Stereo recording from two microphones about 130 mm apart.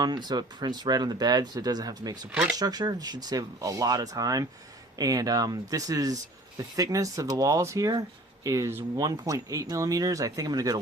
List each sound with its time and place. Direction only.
0.0 s speech: 30° right (ahead or behind)
2.3 s speech: 10° right (ahead or behind)
2.6 s speech: 30° right (ahead or behind)